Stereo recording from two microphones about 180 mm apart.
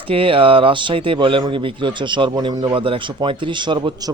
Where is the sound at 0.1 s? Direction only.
30° right (ahead or behind).